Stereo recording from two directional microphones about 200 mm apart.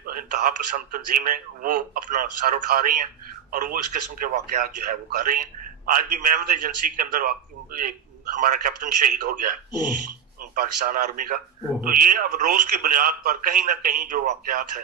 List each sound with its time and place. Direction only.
0.0 s speech: 45° right (ahead or behind)
9.0 s speech: 40° right (ahead or behind)